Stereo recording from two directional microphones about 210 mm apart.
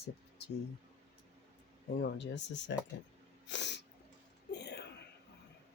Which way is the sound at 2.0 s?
55° left (ahead or behind).